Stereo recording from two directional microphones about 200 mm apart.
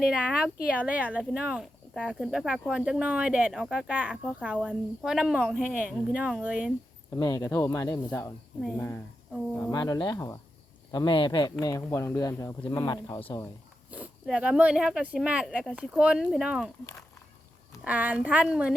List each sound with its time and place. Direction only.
0.0 s speech: 5° right (ahead or behind)
7.2 s speech: 15° left (ahead or behind)
9.6 s speech: 15° left (ahead or behind)
13.9 s a woman's voice: 5° right (ahead or behind)